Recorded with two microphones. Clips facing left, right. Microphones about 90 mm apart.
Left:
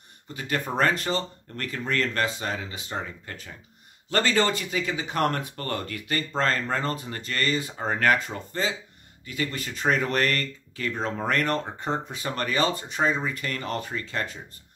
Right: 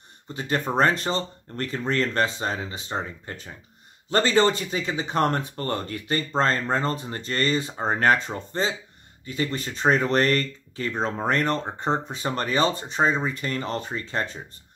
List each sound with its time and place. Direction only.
0.3 s speech: 30° right (ahead or behind)